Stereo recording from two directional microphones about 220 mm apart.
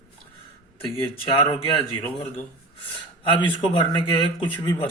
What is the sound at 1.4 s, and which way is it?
Speech, 25° left (ahead or behind).